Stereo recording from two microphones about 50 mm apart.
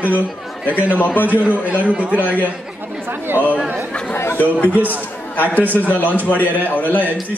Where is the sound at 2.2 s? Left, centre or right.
Left.